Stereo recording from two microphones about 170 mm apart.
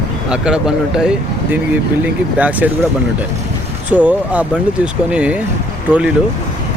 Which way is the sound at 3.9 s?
10° right (ahead or behind).